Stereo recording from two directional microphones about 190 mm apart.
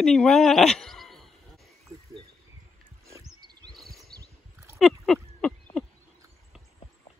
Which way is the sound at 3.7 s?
Centre (ahead or behind).